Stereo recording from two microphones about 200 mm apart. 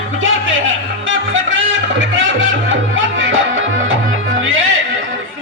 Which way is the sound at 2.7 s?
75° right (ahead or behind).